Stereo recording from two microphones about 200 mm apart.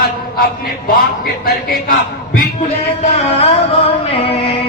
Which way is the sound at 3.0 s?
30° left (ahead or behind).